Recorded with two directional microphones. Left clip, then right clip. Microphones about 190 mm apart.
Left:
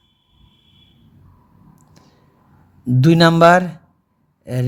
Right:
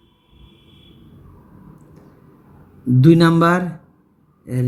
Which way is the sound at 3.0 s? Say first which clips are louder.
Left 3 dB; 55° left (ahead or behind).